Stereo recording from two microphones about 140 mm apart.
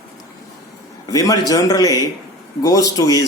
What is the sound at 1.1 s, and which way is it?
Speech, 25° left (ahead or behind).